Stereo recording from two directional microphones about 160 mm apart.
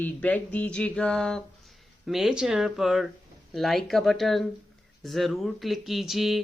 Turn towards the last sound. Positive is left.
turn(degrees=0)  # may be behind; listen again after turning